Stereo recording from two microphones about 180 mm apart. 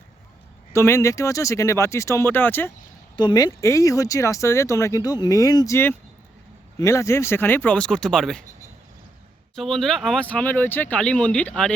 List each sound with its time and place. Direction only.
0.7 s speech: 15° left (ahead or behind)
3.2 s speech: 25° left (ahead or behind); by 8.4 s 5° left (ahead or behind)
9.6 s speech: centre (ahead or behind)